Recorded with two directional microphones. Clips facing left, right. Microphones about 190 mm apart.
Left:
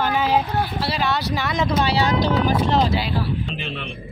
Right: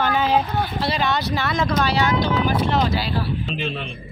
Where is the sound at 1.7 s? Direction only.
35° left (ahead or behind).